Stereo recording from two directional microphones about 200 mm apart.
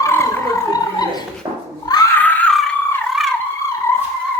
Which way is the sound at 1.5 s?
25° right (ahead or behind).